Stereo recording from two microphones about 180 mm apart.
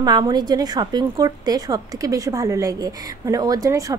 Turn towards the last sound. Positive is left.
turn(degrees=-20)  # may be behind; listen again after turning